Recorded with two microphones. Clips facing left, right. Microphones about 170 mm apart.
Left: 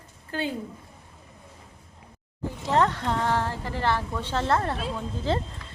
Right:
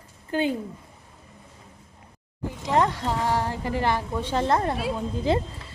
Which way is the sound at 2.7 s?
10° right (ahead or behind).